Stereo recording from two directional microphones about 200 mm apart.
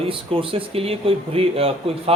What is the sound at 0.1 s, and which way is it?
Speech, 25° right (ahead or behind).